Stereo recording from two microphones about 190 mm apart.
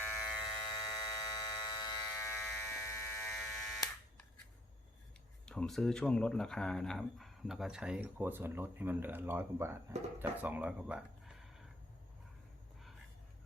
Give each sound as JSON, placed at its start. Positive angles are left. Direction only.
{"t": 0.4, "sound": "electric shaver", "side_deg": 25}
{"t": 3.3, "sound": "electric shaver", "side_deg": 5}
{"t": 5.5, "sound": "speech", "side_deg": 5}